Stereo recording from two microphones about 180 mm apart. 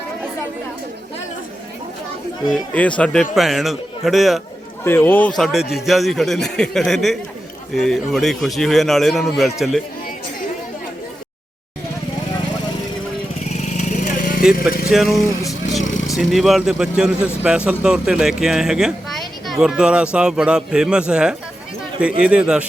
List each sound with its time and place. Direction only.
2.5 s a man's voice: 5° left (ahead or behind)
4.8 s a man's voice: 10° left (ahead or behind)
5.4 s a man's voice: centre (ahead or behind)
13.4 s vehicle: 40° left (ahead or behind)
14.8 s vehicle: centre (ahead or behind)
15.8 s vehicle: 90° left
16.0 s a man's voice: centre (ahead or behind)